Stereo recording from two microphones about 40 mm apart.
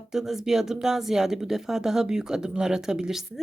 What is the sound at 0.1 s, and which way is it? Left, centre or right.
Speech, centre.